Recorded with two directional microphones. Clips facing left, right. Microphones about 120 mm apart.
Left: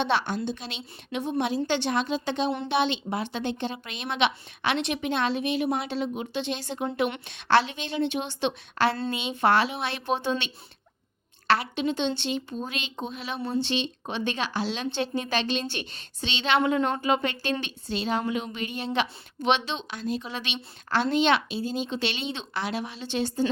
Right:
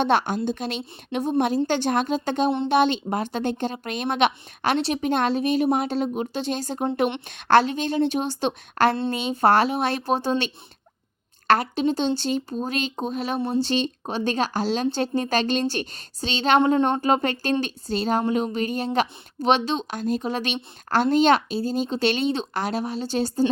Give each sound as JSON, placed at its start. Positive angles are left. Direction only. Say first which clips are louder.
{"t": 0.0, "sound": "a woman's voice", "louder": "right 5 dB", "side_deg": -50}
{"t": 16.6, "sound": "a woman's voice", "louder": "right 5 dB", "side_deg": -30}
{"t": 17.0, "sound": "a woman's voice", "louder": "right 4 dB", "side_deg": -40}